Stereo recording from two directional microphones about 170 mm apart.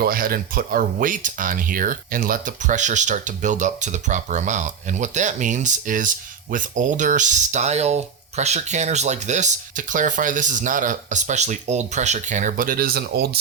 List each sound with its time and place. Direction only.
0.0 s speech: 60° right (ahead or behind)